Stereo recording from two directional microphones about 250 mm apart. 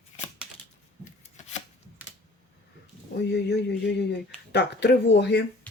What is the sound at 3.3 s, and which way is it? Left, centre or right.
Speech, left.